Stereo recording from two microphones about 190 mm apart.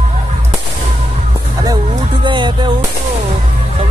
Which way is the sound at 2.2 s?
25° right (ahead or behind).